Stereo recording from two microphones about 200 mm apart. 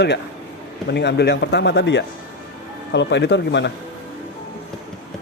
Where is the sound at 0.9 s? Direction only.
55° left (ahead or behind).